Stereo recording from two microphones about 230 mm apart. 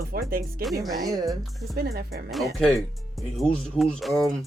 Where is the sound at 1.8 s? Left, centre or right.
Right.